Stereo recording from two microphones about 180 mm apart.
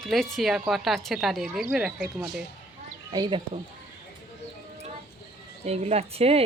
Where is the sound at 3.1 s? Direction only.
25° right (ahead or behind).